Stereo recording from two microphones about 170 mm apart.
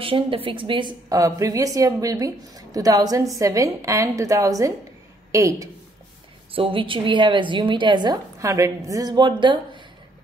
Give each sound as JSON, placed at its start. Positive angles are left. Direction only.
{"t": 0.0, "sound": "a woman's voice", "side_deg": -30}
{"t": 6.5, "sound": "a woman's voice", "side_deg": -30}